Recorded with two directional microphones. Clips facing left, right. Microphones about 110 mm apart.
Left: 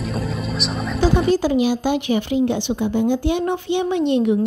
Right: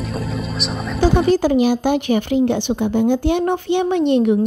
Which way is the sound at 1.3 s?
50° right (ahead or behind).